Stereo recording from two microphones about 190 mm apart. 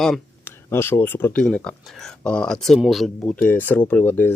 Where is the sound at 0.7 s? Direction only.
10° left (ahead or behind).